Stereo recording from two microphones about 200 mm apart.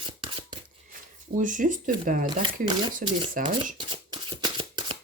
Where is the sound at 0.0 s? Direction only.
25° right (ahead or behind).